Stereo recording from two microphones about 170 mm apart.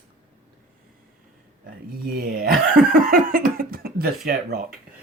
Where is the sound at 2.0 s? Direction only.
60° right (ahead or behind).